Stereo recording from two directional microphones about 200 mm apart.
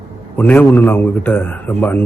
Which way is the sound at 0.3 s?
10° left (ahead or behind).